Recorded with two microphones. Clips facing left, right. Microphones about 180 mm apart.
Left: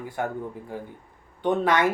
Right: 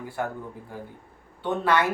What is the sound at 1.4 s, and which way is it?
Speech, 15° left (ahead or behind).